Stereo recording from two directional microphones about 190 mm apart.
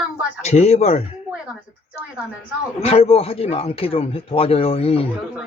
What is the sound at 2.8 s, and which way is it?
A man's voice, 30° left (ahead or behind).